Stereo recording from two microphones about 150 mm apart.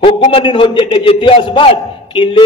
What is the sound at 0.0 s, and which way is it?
A man's voice, 35° left (ahead or behind).